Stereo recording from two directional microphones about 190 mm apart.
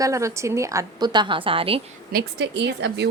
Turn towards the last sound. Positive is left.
turn(degrees=-65)  # may be behind; listen again after turning